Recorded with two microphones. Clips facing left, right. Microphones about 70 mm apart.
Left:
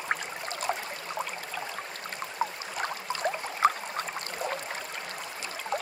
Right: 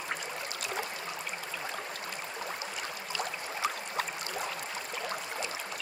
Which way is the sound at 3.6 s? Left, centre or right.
Left.